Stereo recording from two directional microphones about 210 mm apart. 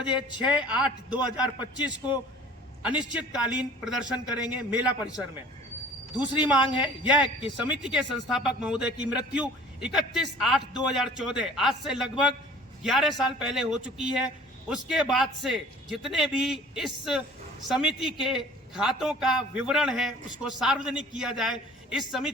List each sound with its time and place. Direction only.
0.0 s a man's voice: 5° right (ahead or behind)
1.4 s a man's voice: 20° left (ahead or behind)
1.8 s a man's voice: 5° right (ahead or behind)
2.8 s a man's voice: 20° left (ahead or behind)
3.2 s a man's voice: 5° right (ahead or behind)
6.3 s a man's voice: 5° right (ahead or behind)